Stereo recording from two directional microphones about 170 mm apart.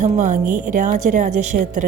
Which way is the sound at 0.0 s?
50° right (ahead or behind).